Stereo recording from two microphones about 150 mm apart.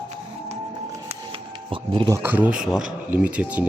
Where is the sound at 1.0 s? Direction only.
35° right (ahead or behind).